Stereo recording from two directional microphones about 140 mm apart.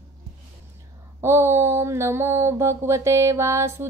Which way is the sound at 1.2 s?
20° right (ahead or behind).